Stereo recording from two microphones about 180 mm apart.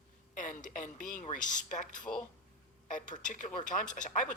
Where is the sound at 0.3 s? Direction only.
45° left (ahead or behind).